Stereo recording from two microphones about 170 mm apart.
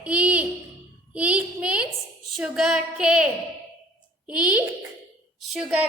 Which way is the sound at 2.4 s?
Centre (ahead or behind).